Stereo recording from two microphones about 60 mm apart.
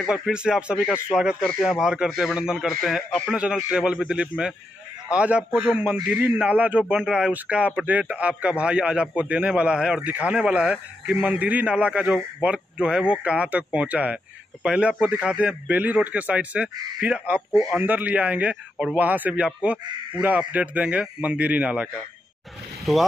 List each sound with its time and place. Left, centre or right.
0.1 s speech: centre
2.8 s speech: centre
3.3 s a man's voice: centre
11.2 s a man's voice: right
15.7 s a man's voice: right
22.9 s speech: centre